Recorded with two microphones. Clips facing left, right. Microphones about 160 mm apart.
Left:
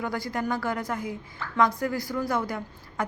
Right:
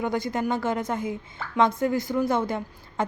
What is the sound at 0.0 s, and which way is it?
A woman's voice, 20° right (ahead or behind).